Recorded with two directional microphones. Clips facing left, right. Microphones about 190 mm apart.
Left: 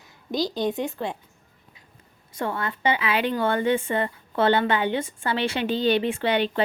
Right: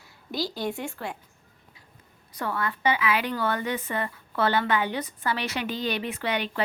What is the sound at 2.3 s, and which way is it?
A woman's voice, 25° left (ahead or behind).